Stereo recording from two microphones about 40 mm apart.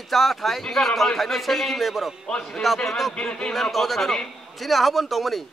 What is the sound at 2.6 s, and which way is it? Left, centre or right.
Speech, centre.